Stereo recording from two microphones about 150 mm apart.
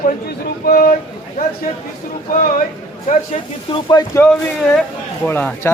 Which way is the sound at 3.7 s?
25° left (ahead or behind).